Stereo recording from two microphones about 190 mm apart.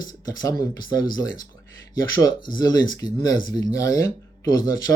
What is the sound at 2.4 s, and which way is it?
Speech, 20° left (ahead or behind).